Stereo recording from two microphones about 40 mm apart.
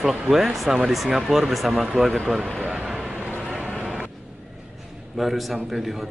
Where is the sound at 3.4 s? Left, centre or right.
Centre.